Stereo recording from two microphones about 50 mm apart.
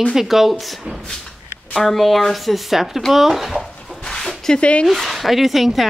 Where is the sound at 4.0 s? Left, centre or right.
Centre.